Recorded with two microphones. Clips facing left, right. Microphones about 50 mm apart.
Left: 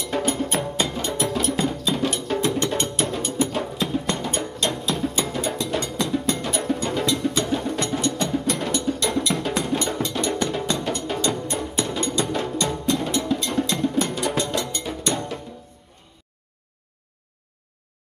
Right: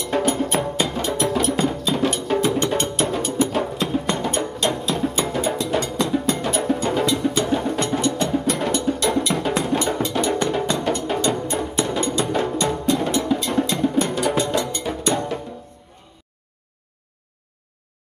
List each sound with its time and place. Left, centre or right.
0.0 s music: centre